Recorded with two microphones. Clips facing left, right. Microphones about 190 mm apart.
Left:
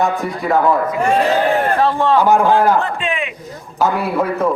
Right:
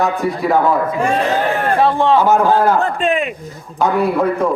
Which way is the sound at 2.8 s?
40° right (ahead or behind).